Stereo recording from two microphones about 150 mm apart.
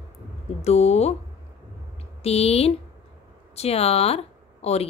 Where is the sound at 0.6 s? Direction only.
45° left (ahead or behind).